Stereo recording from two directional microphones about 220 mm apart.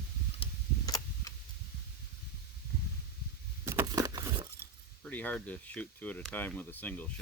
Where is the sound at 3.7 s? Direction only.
15° right (ahead or behind).